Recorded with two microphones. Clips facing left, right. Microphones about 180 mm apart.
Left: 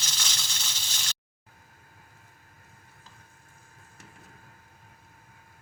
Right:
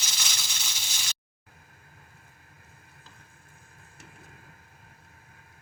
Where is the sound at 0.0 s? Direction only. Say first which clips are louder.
Even; 10° right (ahead or behind).